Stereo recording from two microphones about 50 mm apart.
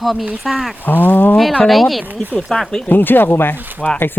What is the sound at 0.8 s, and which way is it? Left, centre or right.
Speech, left.